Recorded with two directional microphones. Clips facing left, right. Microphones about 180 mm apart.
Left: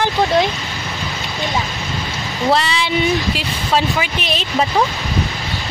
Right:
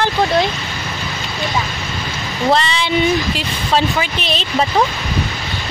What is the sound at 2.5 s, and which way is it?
Speech, 5° left (ahead or behind).